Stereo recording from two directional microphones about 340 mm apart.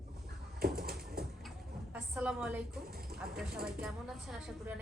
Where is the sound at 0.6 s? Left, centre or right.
Right.